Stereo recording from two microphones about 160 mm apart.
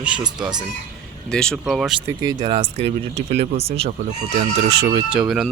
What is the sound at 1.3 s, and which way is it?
Speech, 5° left (ahead or behind).